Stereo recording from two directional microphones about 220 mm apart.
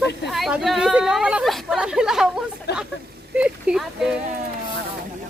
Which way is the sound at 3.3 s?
5° right (ahead or behind).